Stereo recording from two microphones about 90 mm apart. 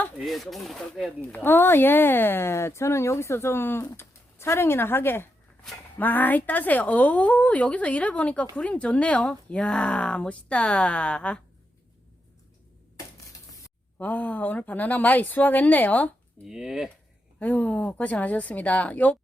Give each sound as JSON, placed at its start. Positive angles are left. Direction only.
{"t": 0.3, "sound": "speech", "side_deg": 0}
{"t": 1.3, "sound": "speech", "side_deg": 20}
{"t": 14.0, "sound": "speech", "side_deg": 20}
{"t": 16.4, "sound": "speech", "side_deg": -5}
{"t": 17.4, "sound": "speech", "side_deg": 15}